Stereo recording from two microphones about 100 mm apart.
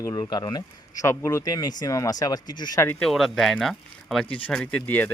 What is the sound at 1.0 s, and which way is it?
Speech, 30° left (ahead or behind).